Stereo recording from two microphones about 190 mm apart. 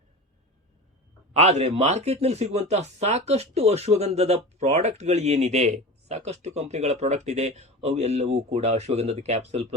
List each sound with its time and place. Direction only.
1.4 s speech: 35° right (ahead or behind)